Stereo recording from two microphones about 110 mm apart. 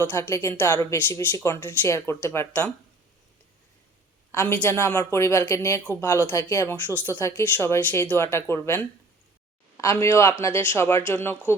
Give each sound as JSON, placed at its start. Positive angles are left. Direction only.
{"t": 0.0, "sound": "speech", "side_deg": 20}
{"t": 4.3, "sound": "a woman's voice", "side_deg": 30}